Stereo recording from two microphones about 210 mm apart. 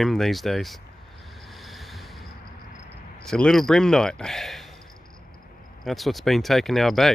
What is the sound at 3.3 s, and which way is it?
Speech, centre (ahead or behind).